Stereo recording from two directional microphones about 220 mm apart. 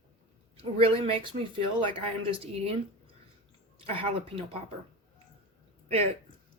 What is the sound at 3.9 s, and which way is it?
Speech, 25° right (ahead or behind).